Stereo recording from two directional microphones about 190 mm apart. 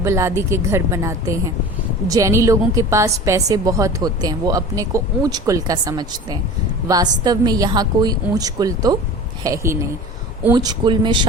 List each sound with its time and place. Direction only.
0.0 s a woman's voice: 15° right (ahead or behind)